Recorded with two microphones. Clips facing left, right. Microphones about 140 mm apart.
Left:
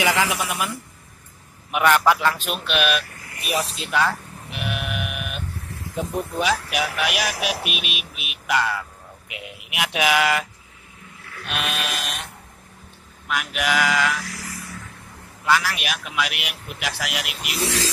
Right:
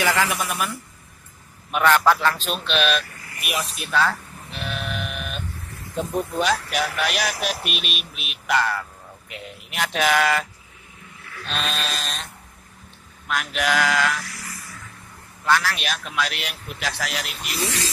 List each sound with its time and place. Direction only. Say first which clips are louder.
0.0 s a man's voice: left 1 dB; 15° left (ahead or behind)
3.3 s a sound: left 3 dB; 30° left (ahead or behind); by 5.4 s 10° left (ahead or behind)
6.4 s a man's voice: left 1 dB; 5° left (ahead or behind)
11.4 s a man's voice: even; 10° left (ahead or behind)
13.3 s speech: right 1 dB; 5° left (ahead or behind)
15.4 s a man's voice: even; 10° left (ahead or behind)
17.6 s a sound: left 6 dB; 90° left